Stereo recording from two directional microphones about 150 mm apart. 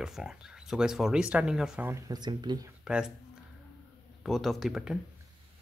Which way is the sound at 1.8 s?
20° right (ahead or behind).